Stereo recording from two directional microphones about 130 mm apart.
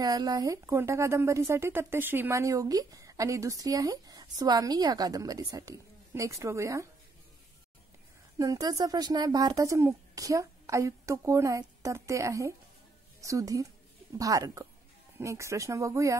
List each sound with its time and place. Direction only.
0.0 s speech: 30° right (ahead or behind)
8.4 s speech: 30° right (ahead or behind)